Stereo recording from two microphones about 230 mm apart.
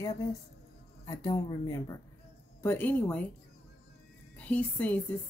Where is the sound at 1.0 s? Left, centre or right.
Centre.